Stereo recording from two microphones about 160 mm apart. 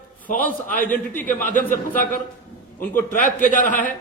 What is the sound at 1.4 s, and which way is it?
Speech, 55° left (ahead or behind).